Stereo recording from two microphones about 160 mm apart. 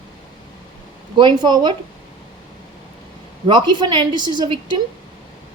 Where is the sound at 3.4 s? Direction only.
30° right (ahead or behind).